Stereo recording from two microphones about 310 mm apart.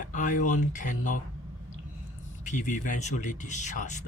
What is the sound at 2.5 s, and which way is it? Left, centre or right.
Speech, left.